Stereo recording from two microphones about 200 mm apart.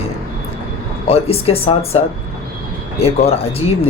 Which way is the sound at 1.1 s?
30° left (ahead or behind).